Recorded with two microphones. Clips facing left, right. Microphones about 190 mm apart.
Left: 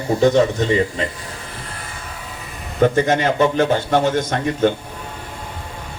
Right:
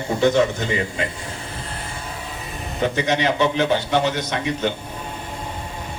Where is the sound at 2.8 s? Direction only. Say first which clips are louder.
Left 4 dB; 50° left (ahead or behind).